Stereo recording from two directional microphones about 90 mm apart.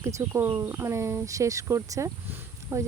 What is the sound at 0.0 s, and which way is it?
Speech, 30° right (ahead or behind).